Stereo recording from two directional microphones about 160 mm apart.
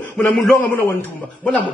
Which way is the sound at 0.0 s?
10° left (ahead or behind).